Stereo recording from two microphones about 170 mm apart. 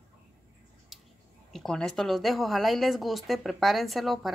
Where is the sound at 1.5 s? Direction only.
5° left (ahead or behind).